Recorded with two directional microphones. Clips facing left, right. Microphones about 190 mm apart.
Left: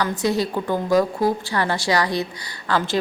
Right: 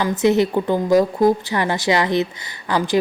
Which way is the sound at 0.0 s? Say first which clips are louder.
Right 5 dB; 20° right (ahead or behind).